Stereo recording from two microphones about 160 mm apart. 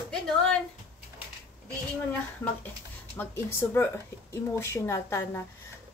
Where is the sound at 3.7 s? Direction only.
15° left (ahead or behind).